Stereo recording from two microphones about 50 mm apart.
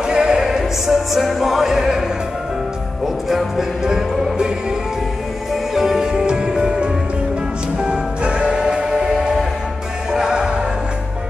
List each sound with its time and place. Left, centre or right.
0.0 s music: centre
3.3 s music: centre
5.8 s music: centre